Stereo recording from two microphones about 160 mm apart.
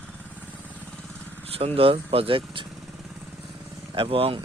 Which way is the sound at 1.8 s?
35° right (ahead or behind).